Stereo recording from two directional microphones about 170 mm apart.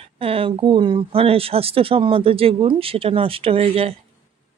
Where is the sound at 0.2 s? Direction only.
35° right (ahead or behind).